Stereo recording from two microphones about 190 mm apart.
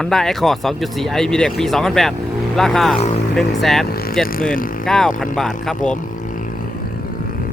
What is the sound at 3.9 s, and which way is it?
Speech, 55° left (ahead or behind).